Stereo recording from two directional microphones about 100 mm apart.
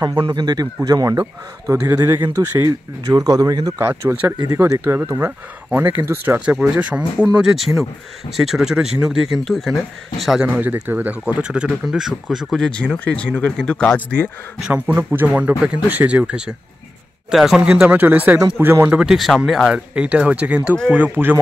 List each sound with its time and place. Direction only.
0.3 s a man's voice: 45° right (ahead or behind); by 2.2 s 25° right (ahead or behind)
2.6 s speech: 35° right (ahead or behind)
3.7 s speech: 20° right (ahead or behind); by 10.4 s centre (ahead or behind)
10.4 s speech: 20° right (ahead or behind)
11.8 s speech: centre (ahead or behind); by 14.3 s 15° left (ahead or behind)
14.7 s speech: 15° right (ahead or behind)
18.9 s speech: 5° right (ahead or behind)